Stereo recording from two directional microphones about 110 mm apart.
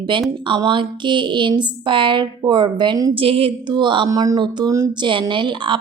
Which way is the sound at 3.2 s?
55° right (ahead or behind).